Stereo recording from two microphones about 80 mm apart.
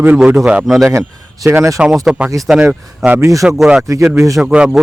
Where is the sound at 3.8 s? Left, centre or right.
Right.